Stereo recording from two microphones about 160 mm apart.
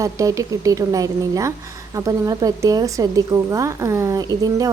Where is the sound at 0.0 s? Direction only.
20° right (ahead or behind).